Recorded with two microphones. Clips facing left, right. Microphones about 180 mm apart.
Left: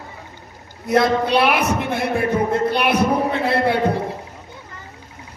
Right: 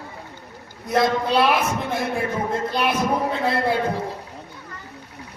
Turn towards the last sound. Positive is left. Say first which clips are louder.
# left 3 dB
turn(degrees=70)  # may be behind; listen again after turning